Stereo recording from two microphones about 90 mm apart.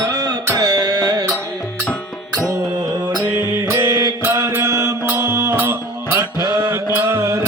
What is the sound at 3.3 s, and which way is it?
Music, 25° right (ahead or behind).